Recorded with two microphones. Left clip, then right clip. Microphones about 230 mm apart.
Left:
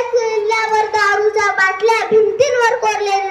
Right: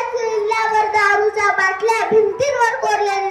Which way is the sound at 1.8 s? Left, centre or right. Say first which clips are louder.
Left 3 dB; centre.